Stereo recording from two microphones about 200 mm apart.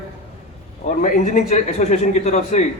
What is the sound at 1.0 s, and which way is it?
A man's voice, 35° left (ahead or behind).